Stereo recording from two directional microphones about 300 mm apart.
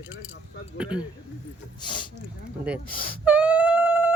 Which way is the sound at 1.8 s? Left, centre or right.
Centre.